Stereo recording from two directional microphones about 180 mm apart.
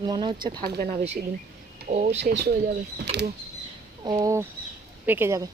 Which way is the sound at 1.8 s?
40° right (ahead or behind).